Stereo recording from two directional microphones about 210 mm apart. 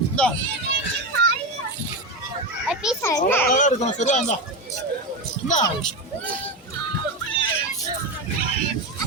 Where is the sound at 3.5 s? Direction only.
35° left (ahead or behind).